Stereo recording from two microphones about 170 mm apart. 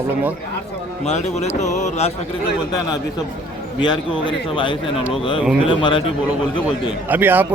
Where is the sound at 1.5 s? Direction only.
45° left (ahead or behind).